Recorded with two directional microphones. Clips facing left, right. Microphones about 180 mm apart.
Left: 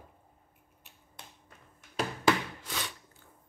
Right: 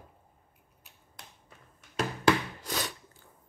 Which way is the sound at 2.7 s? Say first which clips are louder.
Right 4 dB; 40° right (ahead or behind).